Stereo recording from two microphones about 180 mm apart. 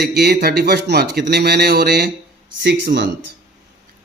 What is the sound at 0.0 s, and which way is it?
A man's voice, 60° right (ahead or behind).